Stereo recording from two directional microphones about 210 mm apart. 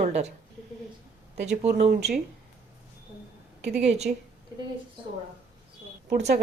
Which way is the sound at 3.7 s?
30° right (ahead or behind).